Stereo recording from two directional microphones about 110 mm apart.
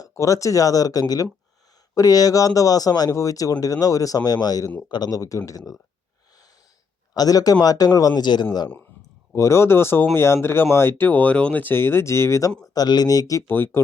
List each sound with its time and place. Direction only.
0.0 s speech: 30° left (ahead or behind)
7.1 s speech: 35° left (ahead or behind)
9.3 s speech: 25° left (ahead or behind)
13.5 s speech: 20° left (ahead or behind)